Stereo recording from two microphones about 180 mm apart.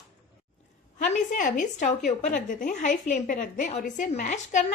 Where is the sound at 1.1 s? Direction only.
45° left (ahead or behind).